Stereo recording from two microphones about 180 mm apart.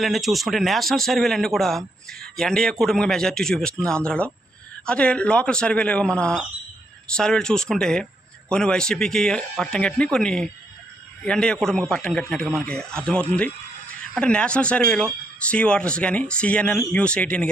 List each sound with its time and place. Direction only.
0.0 s speech: centre (ahead or behind)